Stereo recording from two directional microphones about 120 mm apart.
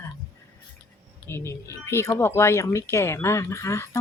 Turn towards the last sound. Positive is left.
turn(degrees=25)  # may be behind; listen again after turning